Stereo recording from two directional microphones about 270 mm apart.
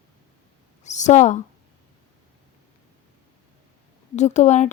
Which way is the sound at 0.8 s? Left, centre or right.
Left.